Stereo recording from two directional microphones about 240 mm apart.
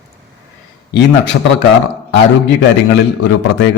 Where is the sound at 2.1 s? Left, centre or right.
Left.